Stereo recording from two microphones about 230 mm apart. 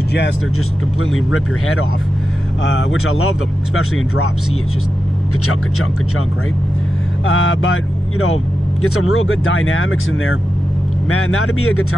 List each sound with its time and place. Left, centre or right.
1.1 s speech: left
7.2 s speech: left